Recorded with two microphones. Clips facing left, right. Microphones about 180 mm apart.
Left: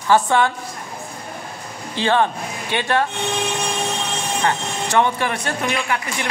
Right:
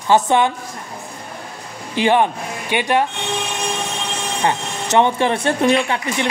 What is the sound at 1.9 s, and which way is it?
Speech, 15° right (ahead or behind).